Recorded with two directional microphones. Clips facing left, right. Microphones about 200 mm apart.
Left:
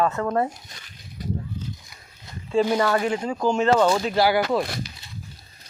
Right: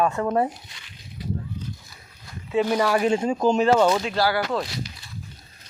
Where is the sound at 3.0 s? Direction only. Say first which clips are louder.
Right 3 dB; 25° right (ahead or behind); by 4.1 s 5° right (ahead or behind).